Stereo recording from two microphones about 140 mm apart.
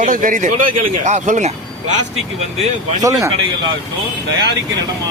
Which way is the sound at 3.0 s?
20° right (ahead or behind).